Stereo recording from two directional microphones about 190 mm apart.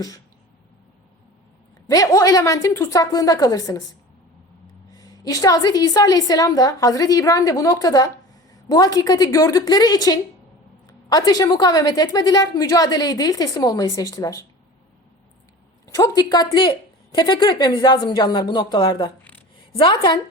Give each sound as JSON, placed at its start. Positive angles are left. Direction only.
{"t": 1.9, "sound": "a woman's voice", "side_deg": 20}
{"t": 4.9, "sound": "a woman's voice", "side_deg": 20}
{"t": 16.0, "sound": "a woman's voice", "side_deg": 20}